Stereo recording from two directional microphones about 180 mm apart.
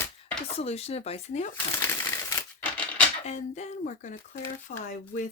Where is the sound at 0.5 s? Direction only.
35° left (ahead or behind).